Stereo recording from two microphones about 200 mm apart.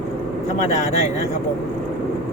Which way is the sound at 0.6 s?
35° left (ahead or behind).